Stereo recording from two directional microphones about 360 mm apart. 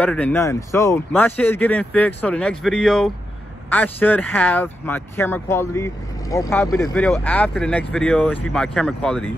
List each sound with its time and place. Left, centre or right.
0.0 s speech: centre